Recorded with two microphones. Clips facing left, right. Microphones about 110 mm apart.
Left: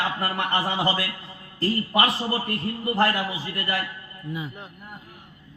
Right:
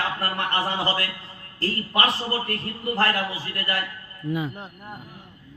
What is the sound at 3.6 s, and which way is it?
Speech, centre (ahead or behind).